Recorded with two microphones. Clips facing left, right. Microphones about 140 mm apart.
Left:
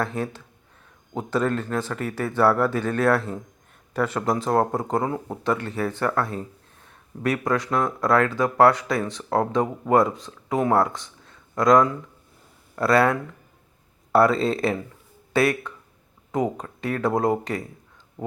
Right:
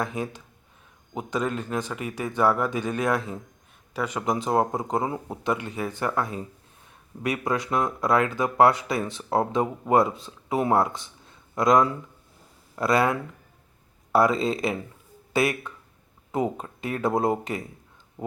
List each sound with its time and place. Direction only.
0.0 s speech: 15° right (ahead or behind)
7.4 s speech: 20° right (ahead or behind)
16.3 s speech: 25° right (ahead or behind)